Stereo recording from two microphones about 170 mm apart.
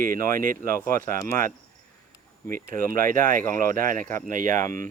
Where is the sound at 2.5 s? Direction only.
55° right (ahead or behind).